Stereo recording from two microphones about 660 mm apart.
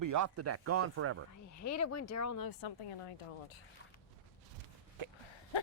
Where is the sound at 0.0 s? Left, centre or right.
Right.